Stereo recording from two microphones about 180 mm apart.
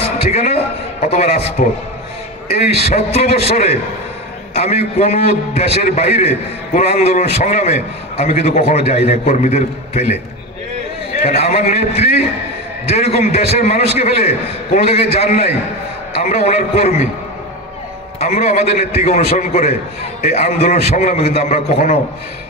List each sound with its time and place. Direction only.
0.3 s a sound: 35° left (ahead or behind)
1.0 s a man's voice: 40° left (ahead or behind)
11.2 s a man's voice: 35° left (ahead or behind)
18.2 s a man's voice: 35° left (ahead or behind)